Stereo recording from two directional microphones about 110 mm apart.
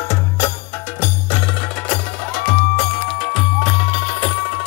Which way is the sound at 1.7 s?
10° left (ahead or behind).